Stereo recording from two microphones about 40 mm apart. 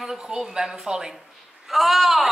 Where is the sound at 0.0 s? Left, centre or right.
Centre.